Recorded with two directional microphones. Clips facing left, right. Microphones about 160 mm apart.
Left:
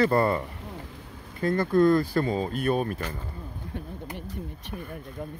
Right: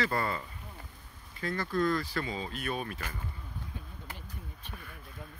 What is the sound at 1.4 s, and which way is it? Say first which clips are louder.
Speech: left 9 dB; 50° left (ahead or behind).